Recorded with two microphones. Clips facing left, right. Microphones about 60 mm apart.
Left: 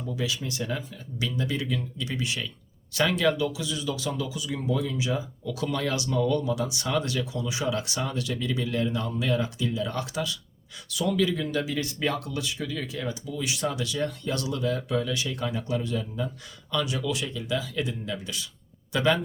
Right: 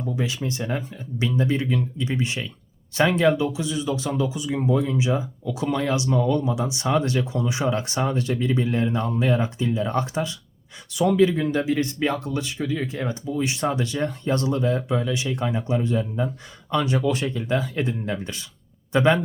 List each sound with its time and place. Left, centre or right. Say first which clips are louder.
0.2 s speech: right 4 dB; right